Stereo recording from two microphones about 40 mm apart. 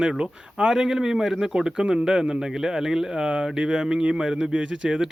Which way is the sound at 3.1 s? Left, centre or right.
Right.